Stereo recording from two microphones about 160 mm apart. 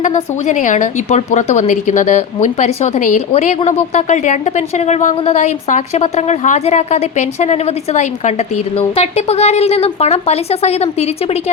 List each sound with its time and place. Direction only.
0.0 s a woman's voice: 50° left (ahead or behind)